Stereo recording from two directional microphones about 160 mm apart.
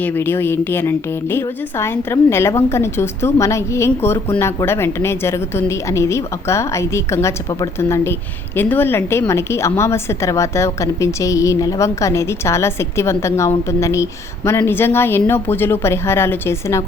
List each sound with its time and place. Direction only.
0.0 s a woman's voice: 15° left (ahead or behind)